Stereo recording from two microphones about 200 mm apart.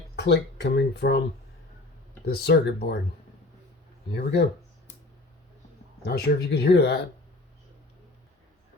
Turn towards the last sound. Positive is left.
turn(degrees=55)  # may be behind; listen again after turning